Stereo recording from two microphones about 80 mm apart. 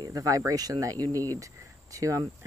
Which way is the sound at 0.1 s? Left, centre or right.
Right.